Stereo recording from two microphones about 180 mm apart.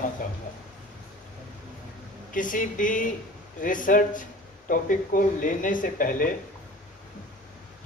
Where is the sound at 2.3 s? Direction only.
50° left (ahead or behind).